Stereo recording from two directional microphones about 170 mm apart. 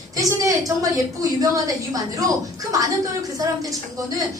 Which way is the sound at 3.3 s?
20° right (ahead or behind).